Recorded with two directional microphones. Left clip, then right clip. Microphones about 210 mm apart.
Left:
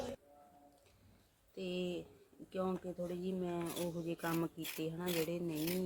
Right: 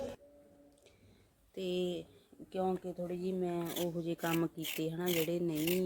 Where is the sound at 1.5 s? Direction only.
40° right (ahead or behind).